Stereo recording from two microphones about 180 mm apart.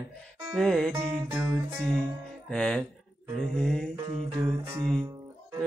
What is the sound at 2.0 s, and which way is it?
Music, 5° left (ahead or behind).